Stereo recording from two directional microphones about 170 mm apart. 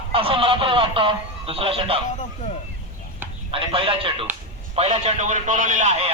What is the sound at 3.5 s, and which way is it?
A man's voice, 30° right (ahead or behind).